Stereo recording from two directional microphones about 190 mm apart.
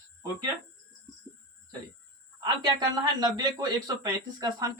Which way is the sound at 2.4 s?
20° right (ahead or behind).